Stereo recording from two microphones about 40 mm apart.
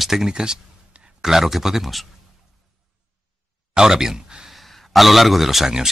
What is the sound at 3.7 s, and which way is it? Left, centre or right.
Speech, centre.